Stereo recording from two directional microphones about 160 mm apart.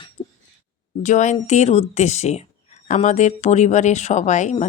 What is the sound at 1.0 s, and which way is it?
Speech, 50° left (ahead or behind).